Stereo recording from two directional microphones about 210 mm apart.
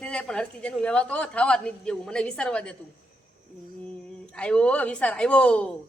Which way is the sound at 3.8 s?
5° left (ahead or behind).